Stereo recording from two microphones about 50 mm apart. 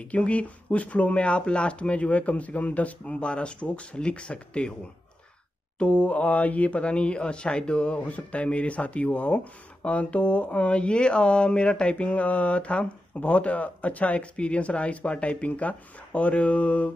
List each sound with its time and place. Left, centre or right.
0.0 s speech: left
5.8 s speech: left